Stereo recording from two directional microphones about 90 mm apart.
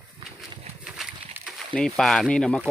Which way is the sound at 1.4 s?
25° right (ahead or behind).